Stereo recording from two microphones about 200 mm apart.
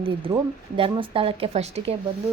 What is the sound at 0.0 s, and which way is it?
A woman's voice, 25° right (ahead or behind).